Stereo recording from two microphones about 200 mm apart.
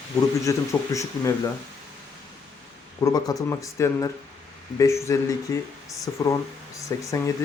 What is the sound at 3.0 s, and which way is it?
Speech, 20° left (ahead or behind).